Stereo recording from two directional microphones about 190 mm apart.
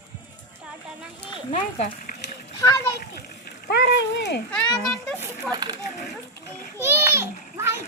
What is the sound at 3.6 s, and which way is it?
Speech, 65° left (ahead or behind).